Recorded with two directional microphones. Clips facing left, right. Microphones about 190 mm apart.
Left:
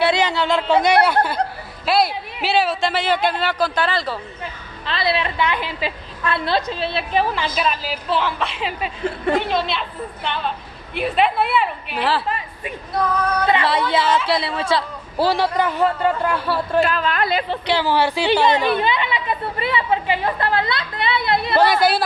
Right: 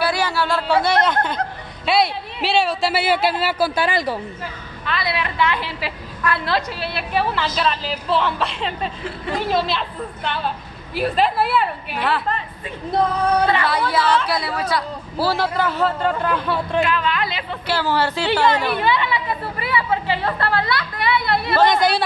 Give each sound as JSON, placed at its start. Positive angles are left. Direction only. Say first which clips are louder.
{"t": 0.0, "sound": "speech", "louder": "left 2 dB", "side_deg": 20}
{"t": 4.8, "sound": "a woman's voice", "louder": "left 3 dB", "side_deg": 25}
{"t": 12.3, "sound": "a woman's voice", "louder": "even", "side_deg": 10}
{"t": 13.5, "sound": "a woman's voice", "louder": "left 2 dB", "side_deg": 20}
{"t": 15.2, "sound": "a woman's voice", "louder": "left 2 dB", "side_deg": 15}
{"t": 16.8, "sound": "a woman's voice", "louder": "left 1 dB", "side_deg": 40}
{"t": 17.6, "sound": "a woman's voice", "louder": "left 1 dB", "side_deg": 15}
{"t": 21.6, "sound": "a woman's voice", "louder": "even", "side_deg": 5}